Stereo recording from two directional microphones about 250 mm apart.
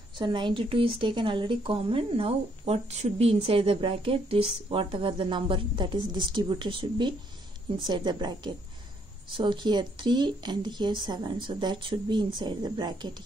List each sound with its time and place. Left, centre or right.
0.2 s speech: centre